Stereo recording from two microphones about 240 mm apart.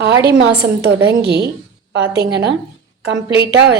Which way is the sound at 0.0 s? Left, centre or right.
Right.